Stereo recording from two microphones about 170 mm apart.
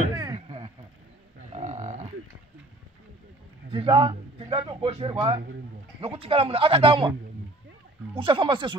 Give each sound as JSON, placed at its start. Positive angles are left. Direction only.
{"t": 0.2, "sound": "a sound", "side_deg": -30}
{"t": 1.5, "sound": "cattle", "side_deg": -40}
{"t": 3.7, "sound": "a man's voice", "side_deg": -30}